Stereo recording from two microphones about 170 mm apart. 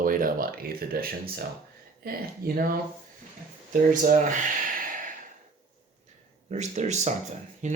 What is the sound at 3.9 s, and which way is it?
Speech, 50° right (ahead or behind).